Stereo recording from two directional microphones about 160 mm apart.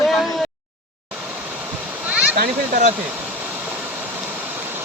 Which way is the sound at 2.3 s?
70° right (ahead or behind).